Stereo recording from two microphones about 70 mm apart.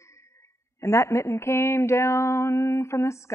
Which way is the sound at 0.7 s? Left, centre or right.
Left.